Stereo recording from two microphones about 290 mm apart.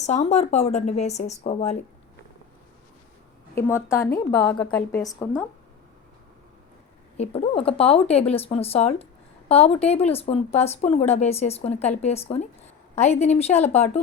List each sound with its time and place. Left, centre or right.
0.0 s speech: left
3.5 s a woman's voice: centre
7.2 s speech: centre